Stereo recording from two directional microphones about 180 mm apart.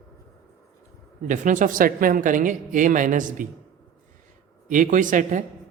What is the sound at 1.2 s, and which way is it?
Speech, 45° right (ahead or behind).